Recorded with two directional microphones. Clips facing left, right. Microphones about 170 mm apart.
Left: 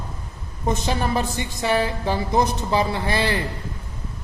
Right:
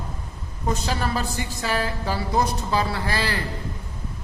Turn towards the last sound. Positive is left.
turn(degrees=20)  # may be behind; listen again after turning